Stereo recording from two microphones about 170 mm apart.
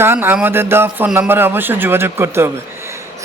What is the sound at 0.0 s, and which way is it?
A man's voice, 15° right (ahead or behind).